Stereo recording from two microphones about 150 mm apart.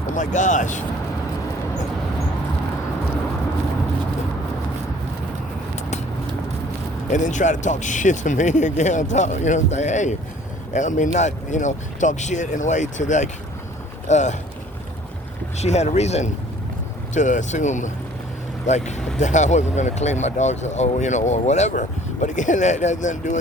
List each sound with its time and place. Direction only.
0.1 s speech: 55° left (ahead or behind)
7.1 s speech: 55° left (ahead or behind)
15.5 s speech: 50° left (ahead or behind)